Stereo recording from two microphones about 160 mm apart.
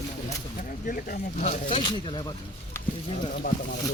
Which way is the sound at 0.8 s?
60° left (ahead or behind).